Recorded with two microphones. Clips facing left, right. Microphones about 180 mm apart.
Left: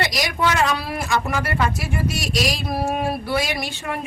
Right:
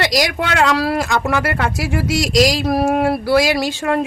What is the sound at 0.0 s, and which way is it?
Speech, 90° right.